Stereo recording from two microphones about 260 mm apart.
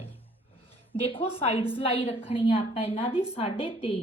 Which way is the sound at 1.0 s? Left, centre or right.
Left.